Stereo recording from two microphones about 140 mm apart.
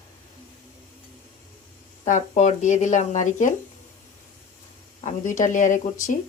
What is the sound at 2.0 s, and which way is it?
Speech, 60° left (ahead or behind).